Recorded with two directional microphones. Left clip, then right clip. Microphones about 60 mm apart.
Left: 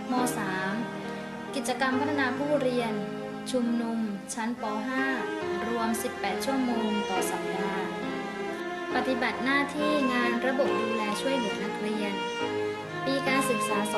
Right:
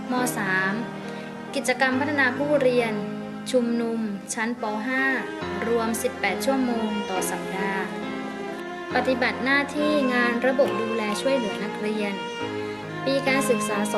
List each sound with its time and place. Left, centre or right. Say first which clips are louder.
0.1 s speech: right 5 dB; right
4.4 s speech: right 5 dB; right
8.9 s speech: right 5 dB; right